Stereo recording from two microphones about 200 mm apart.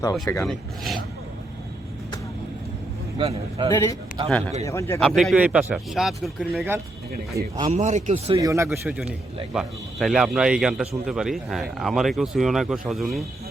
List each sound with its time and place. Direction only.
0.0 s speech: 15° left (ahead or behind)
3.2 s speech: 25° right (ahead or behind)
3.7 s speech: 15° left (ahead or behind)
4.9 s a man's voice: centre (ahead or behind)
7.3 s speech: 20° right (ahead or behind)
7.7 s speech: 35° right (ahead or behind)
8.4 s a man's voice: 15° right (ahead or behind); by 13.2 s centre (ahead or behind)